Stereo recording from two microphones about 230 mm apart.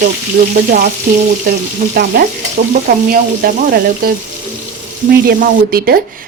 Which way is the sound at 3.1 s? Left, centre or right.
Right.